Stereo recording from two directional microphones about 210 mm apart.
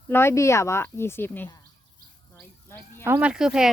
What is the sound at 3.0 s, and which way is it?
Speech, 10° right (ahead or behind).